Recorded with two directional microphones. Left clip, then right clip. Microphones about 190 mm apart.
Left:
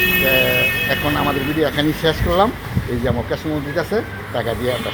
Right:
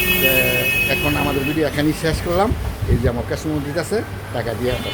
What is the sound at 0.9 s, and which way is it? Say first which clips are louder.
Speech: left 1 dB; 15° right (ahead or behind).